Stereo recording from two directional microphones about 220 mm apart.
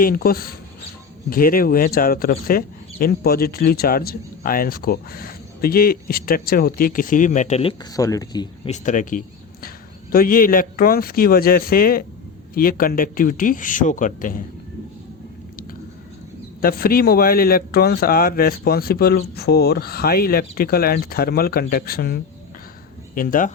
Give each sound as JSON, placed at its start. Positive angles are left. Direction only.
{"t": 0.0, "sound": "a man's voice", "side_deg": 40}
{"t": 8.7, "sound": "speech", "side_deg": 35}
{"t": 16.6, "sound": "a man's voice", "side_deg": 40}